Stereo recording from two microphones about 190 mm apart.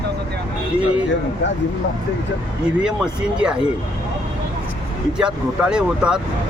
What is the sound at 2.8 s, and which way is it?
Speech, 5° right (ahead or behind).